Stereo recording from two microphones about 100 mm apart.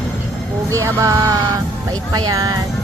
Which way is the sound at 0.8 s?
35° right (ahead or behind).